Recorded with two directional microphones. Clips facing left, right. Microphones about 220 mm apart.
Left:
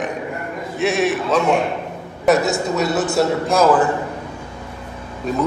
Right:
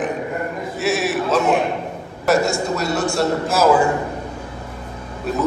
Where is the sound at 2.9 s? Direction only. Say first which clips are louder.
Left 1 dB; 20° left (ahead or behind).